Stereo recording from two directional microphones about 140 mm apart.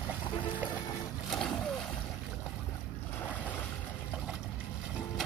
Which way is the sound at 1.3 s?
5° left (ahead or behind).